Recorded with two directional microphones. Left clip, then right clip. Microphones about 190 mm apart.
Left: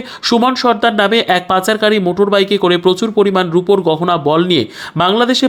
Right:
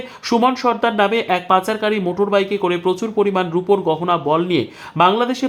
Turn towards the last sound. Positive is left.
turn(degrees=25)  # may be behind; listen again after turning